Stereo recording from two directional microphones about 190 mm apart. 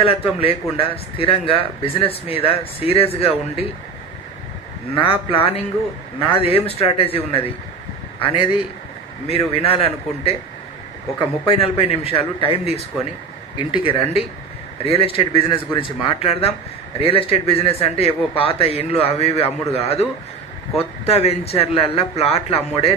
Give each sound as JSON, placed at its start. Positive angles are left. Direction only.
{"t": 0.0, "sound": "a man's voice", "side_deg": 30}
{"t": 4.9, "sound": "a man's voice", "side_deg": 30}
{"t": 13.8, "sound": "a man's voice", "side_deg": 30}